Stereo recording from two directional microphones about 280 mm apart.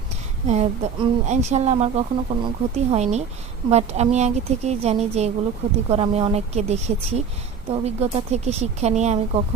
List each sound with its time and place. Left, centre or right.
0.4 s speech: right